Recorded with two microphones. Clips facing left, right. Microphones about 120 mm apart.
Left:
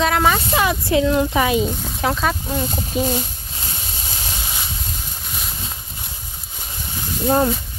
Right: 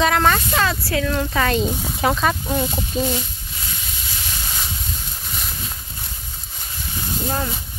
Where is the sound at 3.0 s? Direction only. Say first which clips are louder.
Left 2 dB; 35° left (ahead or behind).